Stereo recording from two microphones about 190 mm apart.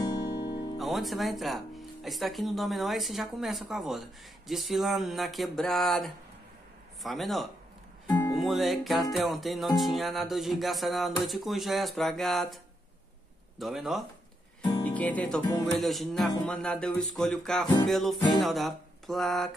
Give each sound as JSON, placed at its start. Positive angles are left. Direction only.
{"t": 0.0, "sound": "music", "side_deg": 20}
{"t": 0.7, "sound": "speech", "side_deg": 0}
{"t": 13.6, "sound": "speech", "side_deg": 0}
{"t": 14.8, "sound": "music", "side_deg": 10}
{"t": 15.6, "sound": "speech", "side_deg": 0}